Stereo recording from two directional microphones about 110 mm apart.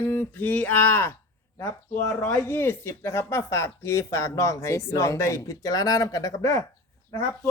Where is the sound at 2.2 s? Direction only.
20° left (ahead or behind).